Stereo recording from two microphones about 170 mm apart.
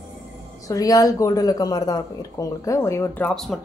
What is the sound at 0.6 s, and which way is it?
A woman's voice, 20° left (ahead or behind).